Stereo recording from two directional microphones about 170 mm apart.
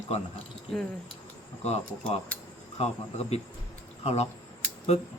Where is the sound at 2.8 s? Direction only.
40° left (ahead or behind).